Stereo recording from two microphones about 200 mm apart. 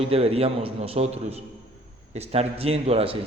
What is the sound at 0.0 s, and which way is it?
A man's voice, 30° right (ahead or behind).